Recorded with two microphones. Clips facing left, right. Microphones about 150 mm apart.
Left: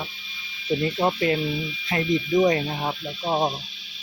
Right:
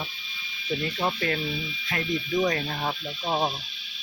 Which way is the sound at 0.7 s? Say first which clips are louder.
Left 5 dB; 25° left (ahead or behind).